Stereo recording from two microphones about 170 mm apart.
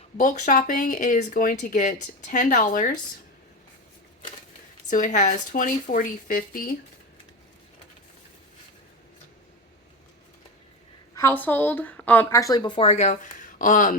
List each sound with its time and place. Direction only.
0.2 s speech: 50° left (ahead or behind)
4.9 s speech: 50° left (ahead or behind)
11.1 s a woman's voice: 15° left (ahead or behind); by 13.1 s 40° left (ahead or behind)
13.6 s speech: 50° left (ahead or behind)